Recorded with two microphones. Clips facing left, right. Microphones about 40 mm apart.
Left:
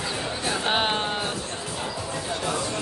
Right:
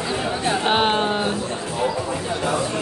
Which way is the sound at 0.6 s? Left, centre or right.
Centre.